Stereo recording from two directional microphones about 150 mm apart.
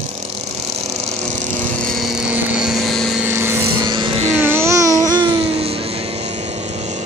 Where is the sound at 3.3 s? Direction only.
15° right (ahead or behind).